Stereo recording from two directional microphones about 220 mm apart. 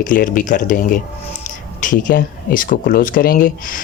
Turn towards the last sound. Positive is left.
turn(degrees=40)  # may be behind; listen again after turning